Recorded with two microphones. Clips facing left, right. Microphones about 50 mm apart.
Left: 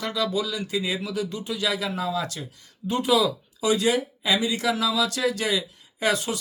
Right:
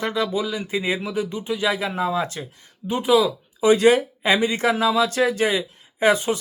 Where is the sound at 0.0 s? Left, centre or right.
Right.